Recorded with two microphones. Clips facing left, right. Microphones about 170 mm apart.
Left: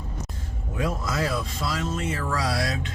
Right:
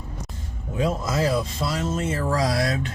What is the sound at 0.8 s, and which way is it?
Speech, 25° right (ahead or behind).